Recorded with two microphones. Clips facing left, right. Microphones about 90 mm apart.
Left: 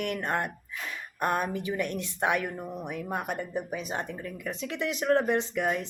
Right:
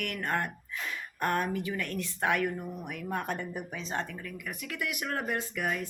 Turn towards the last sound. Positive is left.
turn(degrees=20)  # may be behind; listen again after turning